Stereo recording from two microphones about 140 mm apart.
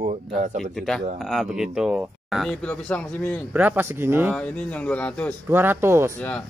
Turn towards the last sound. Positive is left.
turn(degrees=-20)  # may be behind; listen again after turning